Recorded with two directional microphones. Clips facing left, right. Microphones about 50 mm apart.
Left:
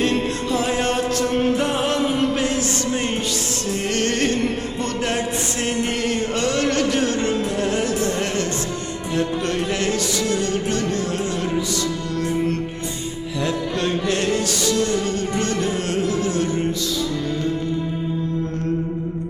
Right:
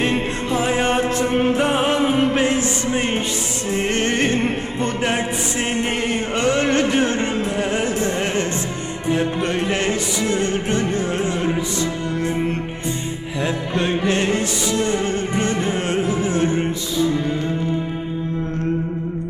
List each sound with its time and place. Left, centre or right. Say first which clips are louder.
0.0 s music: even; right
13.4 s music: right 1 dB; right